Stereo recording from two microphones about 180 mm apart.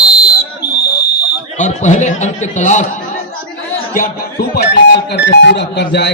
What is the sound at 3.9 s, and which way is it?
Speech, 55° left (ahead or behind).